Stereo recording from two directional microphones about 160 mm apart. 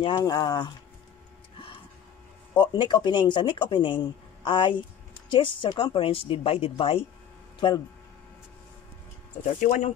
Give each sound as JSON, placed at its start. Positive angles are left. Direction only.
{"t": 0.0, "sound": "speech", "side_deg": 25}
{"t": 2.6, "sound": "speech", "side_deg": 25}
{"t": 9.4, "sound": "speech", "side_deg": 55}